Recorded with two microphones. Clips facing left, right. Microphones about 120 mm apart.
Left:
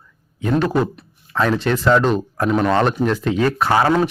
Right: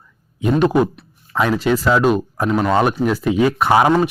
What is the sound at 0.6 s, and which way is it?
Speech, 15° right (ahead or behind).